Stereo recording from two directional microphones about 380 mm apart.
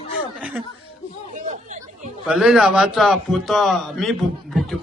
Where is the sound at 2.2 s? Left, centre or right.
Centre.